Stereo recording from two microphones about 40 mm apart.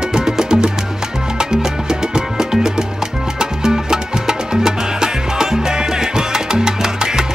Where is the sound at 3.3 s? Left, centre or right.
Centre.